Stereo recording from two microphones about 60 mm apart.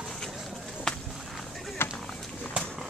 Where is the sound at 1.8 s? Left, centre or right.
Left.